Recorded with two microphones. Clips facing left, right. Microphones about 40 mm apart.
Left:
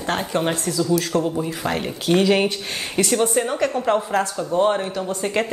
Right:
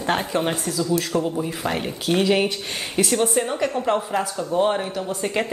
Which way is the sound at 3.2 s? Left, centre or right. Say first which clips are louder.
Left 1 dB; centre.